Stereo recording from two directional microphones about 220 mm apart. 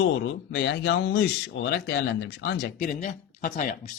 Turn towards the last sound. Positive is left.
turn(degrees=35)  # may be behind; listen again after turning